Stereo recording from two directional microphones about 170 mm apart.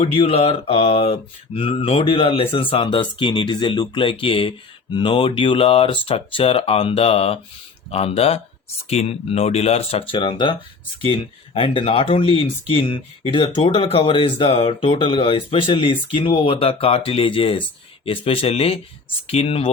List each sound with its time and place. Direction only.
0.0 s speech: 35° left (ahead or behind)